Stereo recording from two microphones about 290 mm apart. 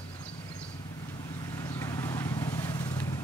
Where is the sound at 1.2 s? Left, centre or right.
Centre.